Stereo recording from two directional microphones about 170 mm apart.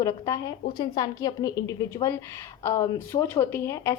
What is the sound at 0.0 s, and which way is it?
A woman's voice, 20° left (ahead or behind).